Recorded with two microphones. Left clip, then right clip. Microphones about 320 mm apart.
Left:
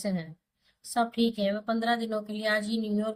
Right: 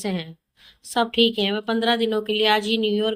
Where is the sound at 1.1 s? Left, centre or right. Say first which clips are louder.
Right 10 dB; centre.